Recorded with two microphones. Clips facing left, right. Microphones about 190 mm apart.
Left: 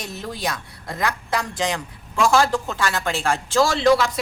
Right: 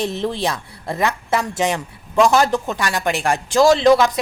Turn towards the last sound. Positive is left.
turn(degrees=-20)  # may be behind; listen again after turning